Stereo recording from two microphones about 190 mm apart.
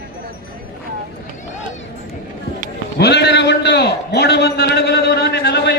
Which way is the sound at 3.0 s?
60° left (ahead or behind).